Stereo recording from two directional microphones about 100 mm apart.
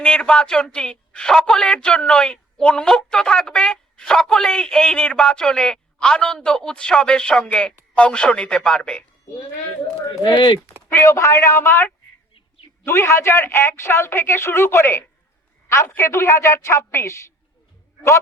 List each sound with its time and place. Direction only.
0.0 s a man's voice: 10° left (ahead or behind)
10.2 s speech: 50° left (ahead or behind)
10.8 s speech: 25° left (ahead or behind)